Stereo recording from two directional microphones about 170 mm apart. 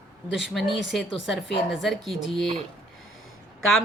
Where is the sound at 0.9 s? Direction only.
Centre (ahead or behind).